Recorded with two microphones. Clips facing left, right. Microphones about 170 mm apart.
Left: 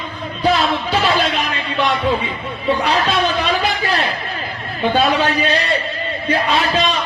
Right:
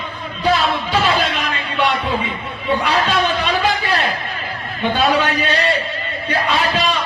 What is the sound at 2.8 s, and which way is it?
Speech, 35° left (ahead or behind).